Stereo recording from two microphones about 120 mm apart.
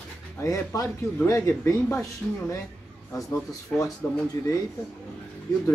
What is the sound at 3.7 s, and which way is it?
Speech, 10° left (ahead or behind).